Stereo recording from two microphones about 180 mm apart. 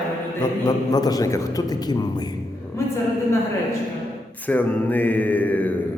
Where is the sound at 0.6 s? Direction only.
20° left (ahead or behind).